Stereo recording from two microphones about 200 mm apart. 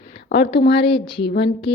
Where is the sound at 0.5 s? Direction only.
55° left (ahead or behind).